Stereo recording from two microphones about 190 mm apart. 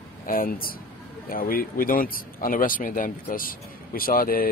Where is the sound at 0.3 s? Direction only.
50° left (ahead or behind).